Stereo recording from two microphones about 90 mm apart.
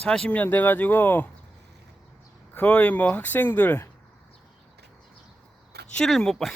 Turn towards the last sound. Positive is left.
turn(degrees=5)  # may be behind; listen again after turning